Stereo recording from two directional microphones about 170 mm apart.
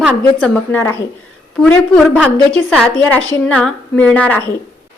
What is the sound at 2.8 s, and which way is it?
Speech, 10° left (ahead or behind).